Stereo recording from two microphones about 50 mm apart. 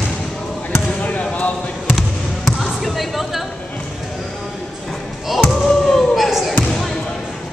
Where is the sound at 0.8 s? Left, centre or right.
Left.